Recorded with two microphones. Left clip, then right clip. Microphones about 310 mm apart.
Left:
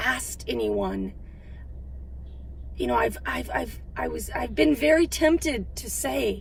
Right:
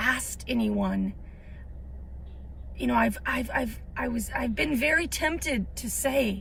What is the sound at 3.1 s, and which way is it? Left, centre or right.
Speech, left.